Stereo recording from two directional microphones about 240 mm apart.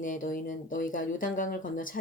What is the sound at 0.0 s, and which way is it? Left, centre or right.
A woman's voice, left.